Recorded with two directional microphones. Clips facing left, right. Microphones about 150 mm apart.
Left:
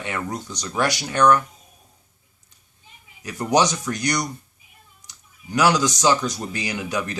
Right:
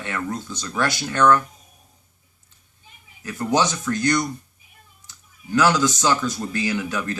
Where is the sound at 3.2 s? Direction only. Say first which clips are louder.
Left 2 dB; 15° left (ahead or behind).